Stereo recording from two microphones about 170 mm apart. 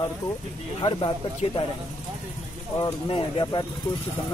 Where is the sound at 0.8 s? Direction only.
35° left (ahead or behind).